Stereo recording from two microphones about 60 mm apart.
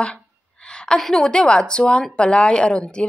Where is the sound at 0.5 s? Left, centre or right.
Centre.